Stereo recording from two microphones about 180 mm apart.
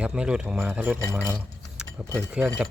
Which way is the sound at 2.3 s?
5° right (ahead or behind).